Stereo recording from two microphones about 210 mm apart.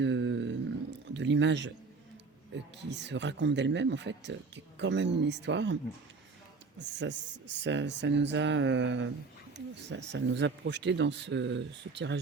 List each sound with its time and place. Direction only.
0.0 s a sound: 60° right (ahead or behind)
1.0 s speech: 60° right (ahead or behind)
2.7 s speech: 55° right (ahead or behind)
6.7 s speech: 55° right (ahead or behind)